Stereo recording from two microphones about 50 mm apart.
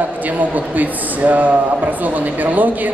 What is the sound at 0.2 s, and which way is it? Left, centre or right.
Speech, right.